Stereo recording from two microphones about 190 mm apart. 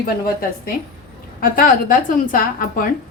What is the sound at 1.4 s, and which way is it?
A woman's voice, 45° left (ahead or behind).